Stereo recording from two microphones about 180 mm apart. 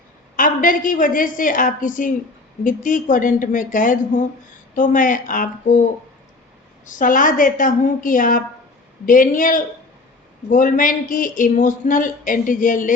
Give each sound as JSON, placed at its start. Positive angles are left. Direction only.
{"t": 0.3, "sound": "speech", "side_deg": 50}
{"t": 6.8, "sound": "speech", "side_deg": 45}